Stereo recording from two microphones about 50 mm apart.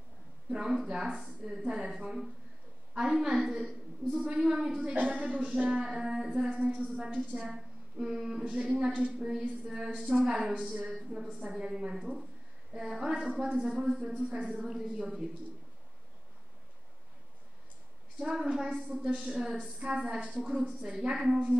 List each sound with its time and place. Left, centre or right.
0.5 s a woman's voice: centre
5.0 s a woman's voice: right; by 6.3 s centre
6.3 s a woman's voice: centre
11.9 s a woman's voice: centre; by 14.7 s right
14.7 s a woman's voice: centre
18.2 s a woman's voice: centre